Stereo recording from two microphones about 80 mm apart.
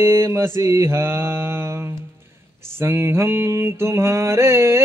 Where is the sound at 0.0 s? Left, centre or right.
Right.